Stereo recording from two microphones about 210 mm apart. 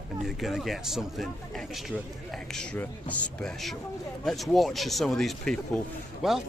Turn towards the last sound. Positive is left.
turn(degrees=0)  # may be behind; listen again after turning